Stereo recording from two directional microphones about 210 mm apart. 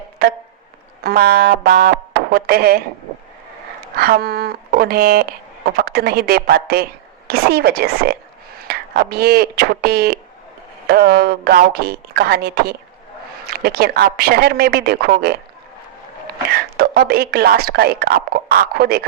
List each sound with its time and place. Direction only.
0.2 s speech: 50° right (ahead or behind)
3.9 s speech: 45° right (ahead or behind)
16.7 s speech: 45° right (ahead or behind)